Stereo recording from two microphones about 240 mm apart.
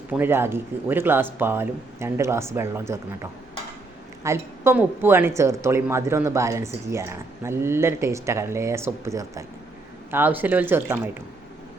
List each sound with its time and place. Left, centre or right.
0.1 s speech: centre